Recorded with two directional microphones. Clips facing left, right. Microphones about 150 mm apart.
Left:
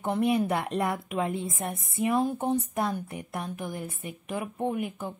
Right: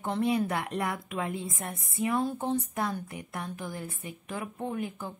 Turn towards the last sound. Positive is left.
turn(degrees=20)  # may be behind; listen again after turning